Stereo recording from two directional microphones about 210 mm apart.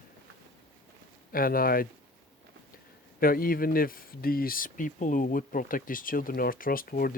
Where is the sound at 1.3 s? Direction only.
45° left (ahead or behind).